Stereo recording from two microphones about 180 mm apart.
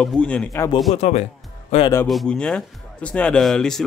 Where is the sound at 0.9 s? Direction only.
40° left (ahead or behind).